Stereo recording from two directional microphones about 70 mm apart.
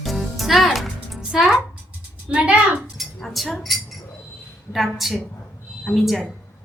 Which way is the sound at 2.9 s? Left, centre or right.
Centre.